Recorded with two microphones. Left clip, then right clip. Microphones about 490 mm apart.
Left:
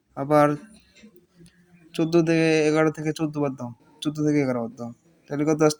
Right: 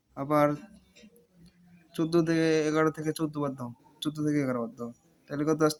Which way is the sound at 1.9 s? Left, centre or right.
Right.